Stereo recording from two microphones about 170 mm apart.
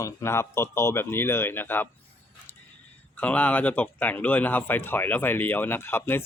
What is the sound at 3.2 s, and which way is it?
A man's voice, 10° left (ahead or behind).